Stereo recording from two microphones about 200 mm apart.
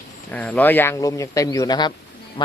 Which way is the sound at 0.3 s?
5° left (ahead or behind).